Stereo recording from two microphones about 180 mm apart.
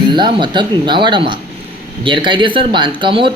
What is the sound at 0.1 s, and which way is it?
Speech, 25° right (ahead or behind).